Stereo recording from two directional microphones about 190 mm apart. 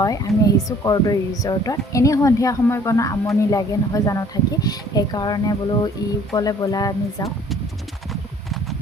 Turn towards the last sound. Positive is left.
turn(degrees=20)  # may be behind; listen again after turning